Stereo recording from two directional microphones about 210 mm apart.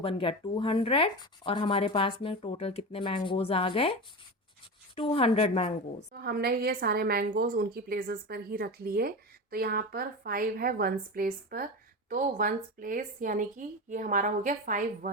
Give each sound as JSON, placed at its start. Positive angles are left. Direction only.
{"t": 0.0, "sound": "speech", "side_deg": 25}
{"t": 4.9, "sound": "speech", "side_deg": 25}
{"t": 6.1, "sound": "a woman's voice", "side_deg": -45}